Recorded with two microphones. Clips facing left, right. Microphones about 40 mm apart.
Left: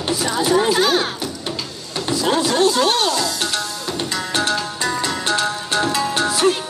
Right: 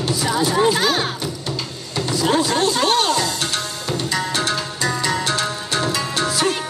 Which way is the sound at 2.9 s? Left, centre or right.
Right.